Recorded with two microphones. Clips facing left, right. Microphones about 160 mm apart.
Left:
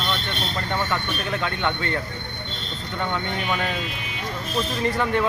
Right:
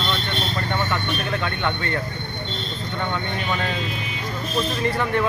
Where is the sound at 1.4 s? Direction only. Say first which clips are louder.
Even; 15° left (ahead or behind).